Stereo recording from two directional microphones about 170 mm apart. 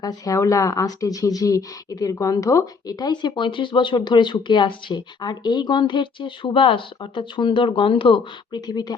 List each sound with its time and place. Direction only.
0.0 s a woman's voice: 20° left (ahead or behind)